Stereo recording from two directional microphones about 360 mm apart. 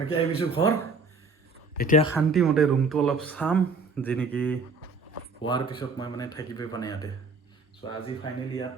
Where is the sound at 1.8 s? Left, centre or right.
Left.